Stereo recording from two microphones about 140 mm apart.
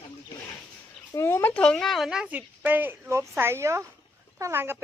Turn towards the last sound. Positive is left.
turn(degrees=-15)  # may be behind; listen again after turning